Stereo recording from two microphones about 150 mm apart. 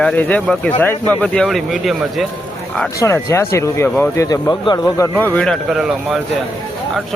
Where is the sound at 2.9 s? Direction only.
20° left (ahead or behind); by 6.2 s centre (ahead or behind).